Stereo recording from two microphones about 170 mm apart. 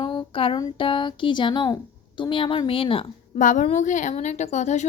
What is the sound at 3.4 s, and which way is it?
A woman's voice, 50° left (ahead or behind).